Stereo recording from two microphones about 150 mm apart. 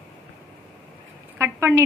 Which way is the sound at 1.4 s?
15° right (ahead or behind).